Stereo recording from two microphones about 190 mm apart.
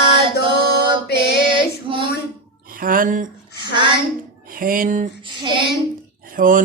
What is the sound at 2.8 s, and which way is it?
Mantra, 45° right (ahead or behind).